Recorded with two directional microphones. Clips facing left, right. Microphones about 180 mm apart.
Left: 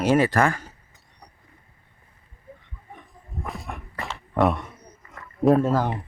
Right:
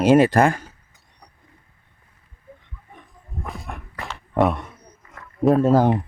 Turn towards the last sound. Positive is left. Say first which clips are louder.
# right 7 dB
turn(degrees=-30)  # may be behind; listen again after turning